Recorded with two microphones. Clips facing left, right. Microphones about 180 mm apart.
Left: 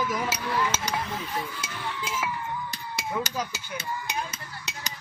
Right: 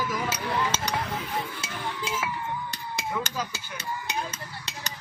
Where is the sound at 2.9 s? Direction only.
15° left (ahead or behind).